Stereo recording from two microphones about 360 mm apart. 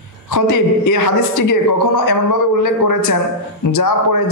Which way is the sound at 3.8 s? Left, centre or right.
Left.